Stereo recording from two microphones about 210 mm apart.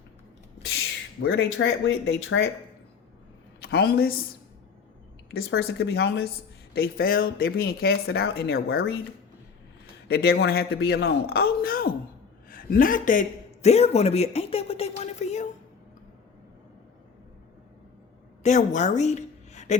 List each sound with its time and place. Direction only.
0.6 s speech: 55° left (ahead or behind)
3.6 s a woman's voice: 50° left (ahead or behind)
5.3 s speech: 50° left (ahead or behind)
10.1 s speech: 50° left (ahead or behind)
12.5 s a sound: 40° left (ahead or behind)
18.4 s a woman's voice: 35° left (ahead or behind)